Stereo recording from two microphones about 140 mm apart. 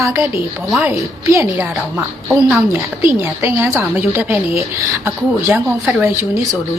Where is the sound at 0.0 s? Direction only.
20° right (ahead or behind).